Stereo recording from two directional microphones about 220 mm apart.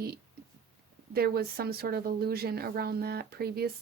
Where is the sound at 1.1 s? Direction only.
45° right (ahead or behind).